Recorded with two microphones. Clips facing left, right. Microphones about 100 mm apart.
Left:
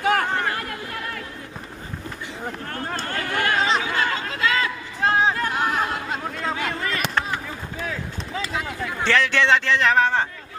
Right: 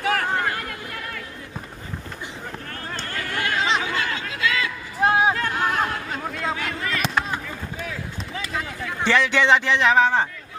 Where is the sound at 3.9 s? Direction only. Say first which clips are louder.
Left 3 dB; 40° left (ahead or behind).